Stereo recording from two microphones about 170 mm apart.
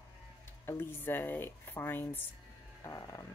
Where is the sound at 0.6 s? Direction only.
15° left (ahead or behind).